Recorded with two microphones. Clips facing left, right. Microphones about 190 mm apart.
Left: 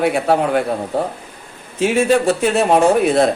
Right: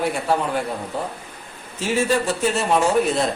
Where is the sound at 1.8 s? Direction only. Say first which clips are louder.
Left 6 dB; 60° left (ahead or behind).